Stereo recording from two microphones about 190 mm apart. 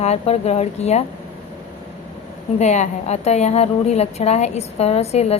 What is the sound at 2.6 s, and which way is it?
A woman's voice, 35° left (ahead or behind).